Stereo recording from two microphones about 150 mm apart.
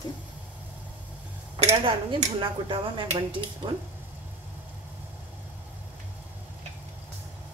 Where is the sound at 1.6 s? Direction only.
35° right (ahead or behind).